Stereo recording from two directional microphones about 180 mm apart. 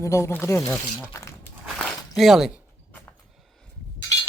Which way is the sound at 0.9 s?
15° left (ahead or behind).